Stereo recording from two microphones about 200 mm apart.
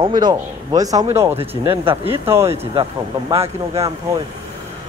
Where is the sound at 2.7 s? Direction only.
25° right (ahead or behind).